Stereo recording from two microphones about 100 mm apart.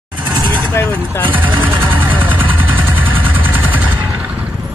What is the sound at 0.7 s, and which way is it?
Speech, 15° left (ahead or behind).